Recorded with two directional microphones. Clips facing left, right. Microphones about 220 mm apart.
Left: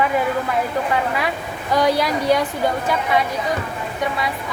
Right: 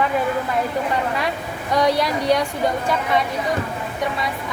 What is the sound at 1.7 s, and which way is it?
Speech, centre (ahead or behind).